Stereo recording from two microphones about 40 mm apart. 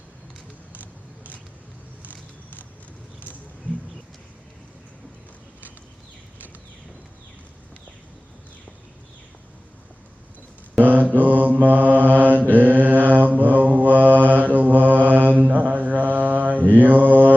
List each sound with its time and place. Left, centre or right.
10.8 s mantra: right